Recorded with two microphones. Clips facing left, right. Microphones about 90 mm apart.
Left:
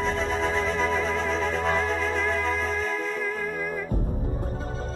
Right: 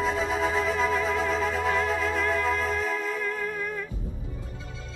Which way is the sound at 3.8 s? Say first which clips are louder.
Left 8 dB; 50° left (ahead or behind).